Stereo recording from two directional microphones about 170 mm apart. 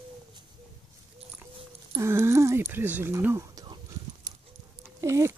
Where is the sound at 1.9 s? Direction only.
15° right (ahead or behind).